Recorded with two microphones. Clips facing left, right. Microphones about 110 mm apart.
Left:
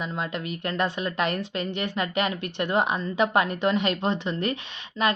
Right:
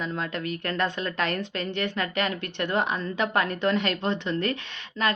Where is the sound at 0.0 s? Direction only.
15° left (ahead or behind).